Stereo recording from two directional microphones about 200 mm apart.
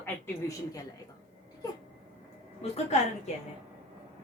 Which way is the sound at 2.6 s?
35° left (ahead or behind).